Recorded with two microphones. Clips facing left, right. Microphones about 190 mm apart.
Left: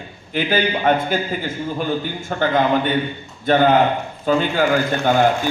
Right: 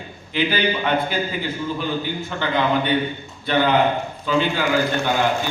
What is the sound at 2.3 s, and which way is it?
A man's voice, 45° left (ahead or behind).